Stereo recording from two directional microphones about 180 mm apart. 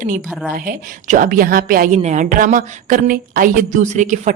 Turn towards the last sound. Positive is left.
turn(degrees=-45)  # may be behind; listen again after turning